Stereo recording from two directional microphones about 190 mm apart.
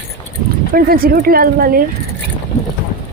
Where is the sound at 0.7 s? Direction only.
50° right (ahead or behind).